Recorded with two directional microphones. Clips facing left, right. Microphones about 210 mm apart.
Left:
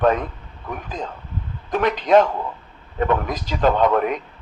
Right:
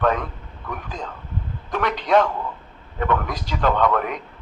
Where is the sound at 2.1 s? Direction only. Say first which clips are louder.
Left 3 dB; 20° left (ahead or behind).